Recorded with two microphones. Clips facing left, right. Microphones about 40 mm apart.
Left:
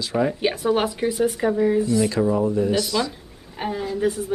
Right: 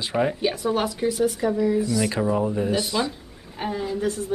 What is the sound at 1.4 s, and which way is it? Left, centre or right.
Speech, left.